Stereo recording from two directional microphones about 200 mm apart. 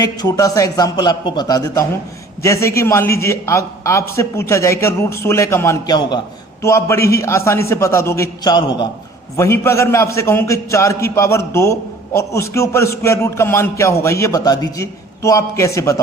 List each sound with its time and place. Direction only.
0.0 s a man's voice: 20° left (ahead or behind)